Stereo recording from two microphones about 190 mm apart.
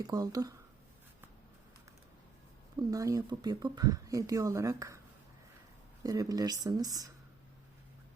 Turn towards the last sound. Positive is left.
turn(degrees=-20)  # may be behind; listen again after turning